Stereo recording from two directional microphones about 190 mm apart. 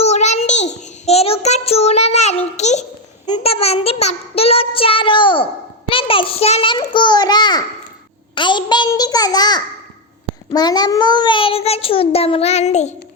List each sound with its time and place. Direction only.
0.0 s child singing: 35° left (ahead or behind)
5.9 s a sound: 30° left (ahead or behind)
10.5 s a child's voice: 20° left (ahead or behind); by 12.9 s 35° left (ahead or behind)